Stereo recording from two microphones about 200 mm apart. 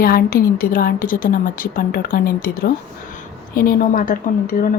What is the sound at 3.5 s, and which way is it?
A woman's voice, 45° left (ahead or behind).